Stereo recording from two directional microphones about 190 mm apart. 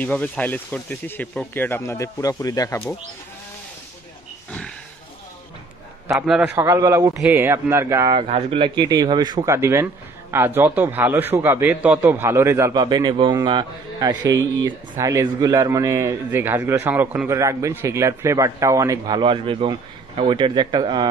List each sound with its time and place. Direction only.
0.0 s speech: 10° left (ahead or behind)
4.5 s pig: 5° left (ahead or behind)
6.1 s a man's voice: 5° right (ahead or behind)
6.5 s a man's voice: 15° right (ahead or behind)
8.2 s a man's voice: 30° right (ahead or behind)